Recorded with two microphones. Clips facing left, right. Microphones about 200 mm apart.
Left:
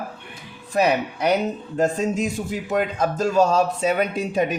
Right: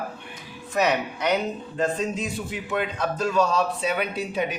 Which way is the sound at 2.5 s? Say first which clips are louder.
Left 5 dB; 40° left (ahead or behind).